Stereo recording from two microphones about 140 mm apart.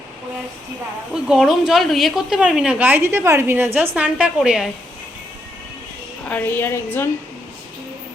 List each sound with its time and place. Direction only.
1.1 s a woman's voice: centre (ahead or behind)
6.2 s a woman's voice: 15° left (ahead or behind)